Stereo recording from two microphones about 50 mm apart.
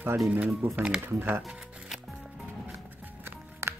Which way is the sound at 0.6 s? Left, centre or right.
Right.